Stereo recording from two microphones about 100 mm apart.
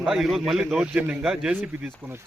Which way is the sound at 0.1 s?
Centre (ahead or behind).